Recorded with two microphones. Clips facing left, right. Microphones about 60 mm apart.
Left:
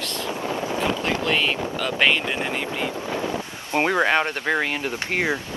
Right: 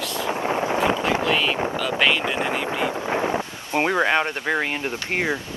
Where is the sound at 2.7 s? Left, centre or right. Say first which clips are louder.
Right 3 dB; centre.